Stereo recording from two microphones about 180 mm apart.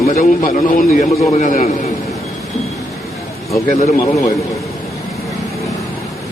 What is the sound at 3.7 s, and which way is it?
Speech, 40° left (ahead or behind).